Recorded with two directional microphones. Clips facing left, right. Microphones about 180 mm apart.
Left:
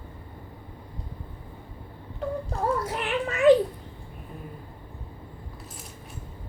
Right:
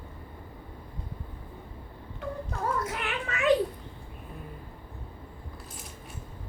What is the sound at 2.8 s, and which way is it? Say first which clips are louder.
Children playing: left 5 dB; 35° left (ahead or behind).